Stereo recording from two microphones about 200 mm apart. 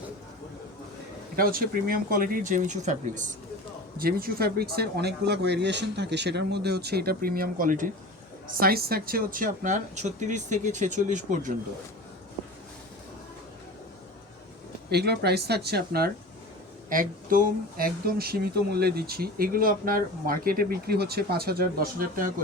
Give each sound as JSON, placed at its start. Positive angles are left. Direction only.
{"t": 1.4, "sound": "speech", "side_deg": -45}
{"t": 14.8, "sound": "speech", "side_deg": -55}